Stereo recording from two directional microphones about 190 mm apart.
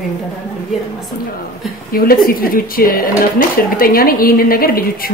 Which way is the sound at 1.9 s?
50° left (ahead or behind).